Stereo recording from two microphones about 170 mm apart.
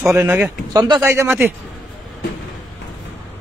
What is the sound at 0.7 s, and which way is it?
Speech, 20° right (ahead or behind).